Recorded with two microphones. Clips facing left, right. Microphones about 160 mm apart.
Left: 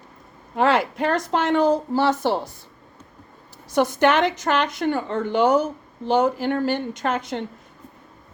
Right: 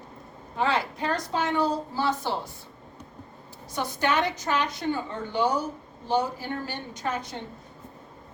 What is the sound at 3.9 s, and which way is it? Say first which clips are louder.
A woman's voice: left 4 dB; 90° left.